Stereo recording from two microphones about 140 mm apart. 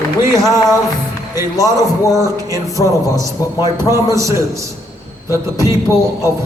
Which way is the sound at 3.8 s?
20° right (ahead or behind).